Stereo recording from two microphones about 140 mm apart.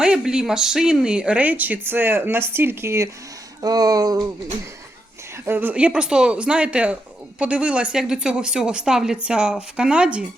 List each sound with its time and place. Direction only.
0.0 s speech: 5° right (ahead or behind); by 4.2 s 25° right (ahead or behind)
5.5 s speech: 15° right (ahead or behind)